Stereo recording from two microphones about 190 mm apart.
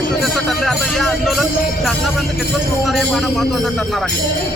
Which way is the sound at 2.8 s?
Centre (ahead or behind).